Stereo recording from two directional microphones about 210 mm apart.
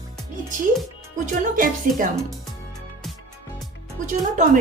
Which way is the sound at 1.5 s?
40° right (ahead or behind).